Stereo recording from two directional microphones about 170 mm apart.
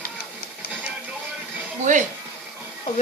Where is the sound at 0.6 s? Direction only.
65° left (ahead or behind).